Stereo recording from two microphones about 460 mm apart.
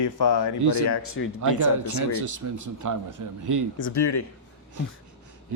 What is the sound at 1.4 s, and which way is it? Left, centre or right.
Speech, right.